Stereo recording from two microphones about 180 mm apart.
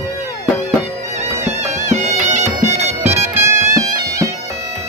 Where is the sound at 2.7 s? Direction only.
35° right (ahead or behind).